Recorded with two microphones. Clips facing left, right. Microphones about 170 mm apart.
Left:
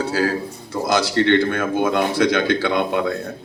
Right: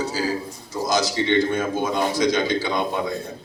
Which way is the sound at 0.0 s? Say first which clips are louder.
Left 4 dB; 60° left (ahead or behind).